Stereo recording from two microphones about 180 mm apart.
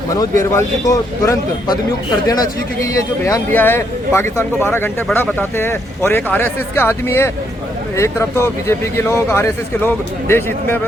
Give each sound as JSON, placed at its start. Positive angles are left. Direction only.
{"t": 0.5, "sound": "a man's voice", "side_deg": 15}